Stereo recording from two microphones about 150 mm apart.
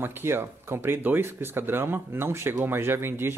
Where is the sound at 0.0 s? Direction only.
15° right (ahead or behind).